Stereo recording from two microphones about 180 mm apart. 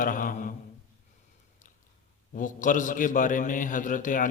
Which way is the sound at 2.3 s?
45° left (ahead or behind).